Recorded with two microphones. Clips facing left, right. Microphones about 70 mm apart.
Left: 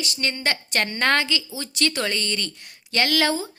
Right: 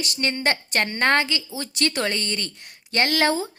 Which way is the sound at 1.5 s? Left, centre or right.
Right.